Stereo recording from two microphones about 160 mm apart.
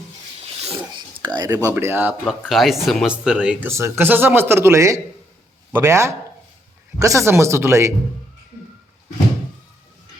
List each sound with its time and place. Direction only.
0.6 s a sound: 30° right (ahead or behind)
1.7 s speech: 15° right (ahead or behind)
2.2 s speech: centre (ahead or behind); by 7.9 s 15° right (ahead or behind)